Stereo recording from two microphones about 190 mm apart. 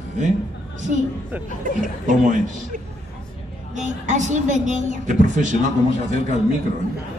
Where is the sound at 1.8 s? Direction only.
45° right (ahead or behind).